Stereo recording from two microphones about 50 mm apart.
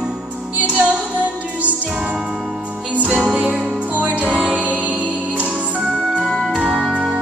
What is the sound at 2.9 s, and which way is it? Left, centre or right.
Music, right.